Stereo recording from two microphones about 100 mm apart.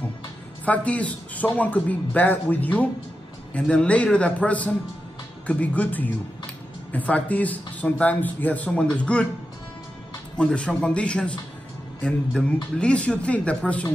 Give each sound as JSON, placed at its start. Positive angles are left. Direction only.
{"t": 0.7, "sound": "speech", "side_deg": 15}
{"t": 10.3, "sound": "speech", "side_deg": 10}